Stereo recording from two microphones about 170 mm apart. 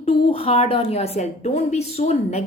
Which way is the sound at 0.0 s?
35° left (ahead or behind).